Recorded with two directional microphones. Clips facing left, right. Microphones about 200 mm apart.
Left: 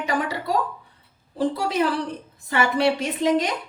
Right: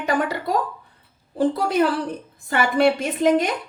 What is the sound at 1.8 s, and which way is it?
A woman's voice, 45° right (ahead or behind).